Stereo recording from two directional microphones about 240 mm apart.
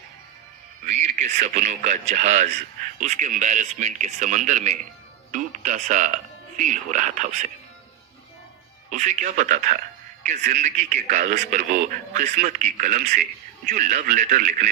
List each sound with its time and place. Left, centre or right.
0.9 s a man's voice: right
8.9 s a man's voice: right